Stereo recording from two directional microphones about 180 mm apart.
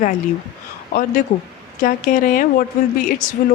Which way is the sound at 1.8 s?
50° left (ahead or behind).